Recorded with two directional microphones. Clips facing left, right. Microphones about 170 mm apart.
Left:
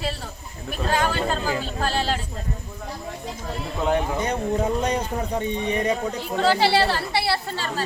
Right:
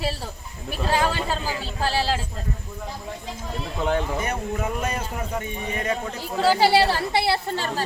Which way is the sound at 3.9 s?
20° left (ahead or behind).